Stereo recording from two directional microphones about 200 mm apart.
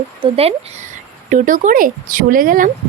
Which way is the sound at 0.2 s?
30° right (ahead or behind).